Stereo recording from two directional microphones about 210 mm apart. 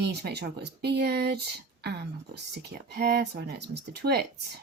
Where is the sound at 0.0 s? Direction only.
50° right (ahead or behind).